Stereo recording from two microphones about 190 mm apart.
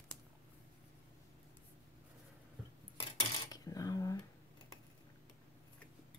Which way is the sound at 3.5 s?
20° left (ahead or behind).